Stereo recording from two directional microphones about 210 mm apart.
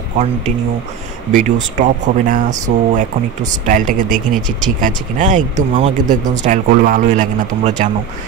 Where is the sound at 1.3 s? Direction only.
35° right (ahead or behind).